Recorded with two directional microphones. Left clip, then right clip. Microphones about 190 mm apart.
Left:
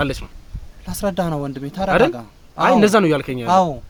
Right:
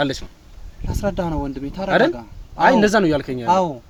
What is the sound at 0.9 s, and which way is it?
Speech, 50° left (ahead or behind).